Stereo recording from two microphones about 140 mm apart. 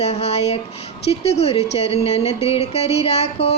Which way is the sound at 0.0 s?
50° left (ahead or behind).